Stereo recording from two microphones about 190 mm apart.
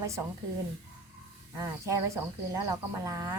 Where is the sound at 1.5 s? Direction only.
15° right (ahead or behind).